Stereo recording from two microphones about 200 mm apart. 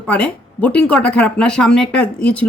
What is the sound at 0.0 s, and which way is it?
A woman's voice, 5° left (ahead or behind).